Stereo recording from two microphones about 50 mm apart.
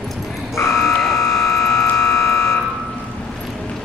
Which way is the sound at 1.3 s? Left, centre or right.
Centre.